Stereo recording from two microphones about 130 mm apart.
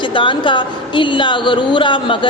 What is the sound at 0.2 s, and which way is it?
A woman's voice, 40° left (ahead or behind).